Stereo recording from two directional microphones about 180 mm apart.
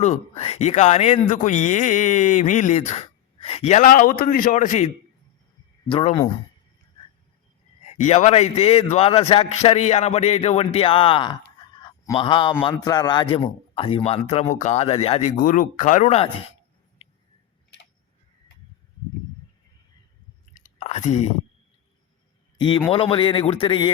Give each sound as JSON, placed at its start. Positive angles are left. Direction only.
{"t": 0.0, "sound": "a man's voice", "side_deg": 40}
{"t": 5.9, "sound": "a man's voice", "side_deg": 30}
{"t": 7.9, "sound": "speech", "side_deg": 40}
{"t": 11.8, "sound": "a sound", "side_deg": 25}
{"t": 12.6, "sound": "speech", "side_deg": 20}
{"t": 20.5, "sound": "chewing", "side_deg": 45}
{"t": 22.5, "sound": "a man's voice", "side_deg": 25}